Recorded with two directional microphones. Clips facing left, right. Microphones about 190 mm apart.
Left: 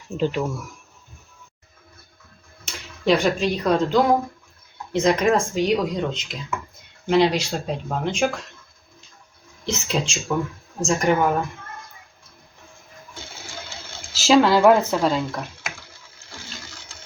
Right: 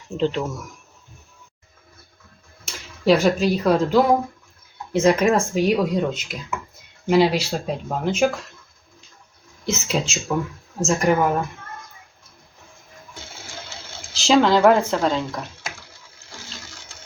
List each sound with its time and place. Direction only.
0.2 s speech: 10° left (ahead or behind)
3.0 s speech: 5° right (ahead or behind)
9.6 s speech: 5° right (ahead or behind)
14.1 s speech: 5° left (ahead or behind)